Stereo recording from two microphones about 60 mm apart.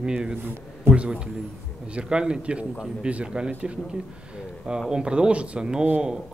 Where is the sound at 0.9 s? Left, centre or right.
Right.